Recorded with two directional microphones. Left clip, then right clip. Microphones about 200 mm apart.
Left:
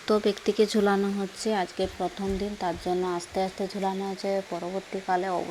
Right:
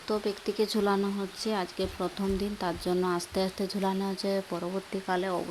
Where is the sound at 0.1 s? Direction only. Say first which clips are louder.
Left 6 dB; 15° left (ahead or behind).